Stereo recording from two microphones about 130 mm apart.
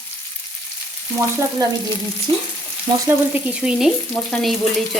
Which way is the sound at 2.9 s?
25° right (ahead or behind).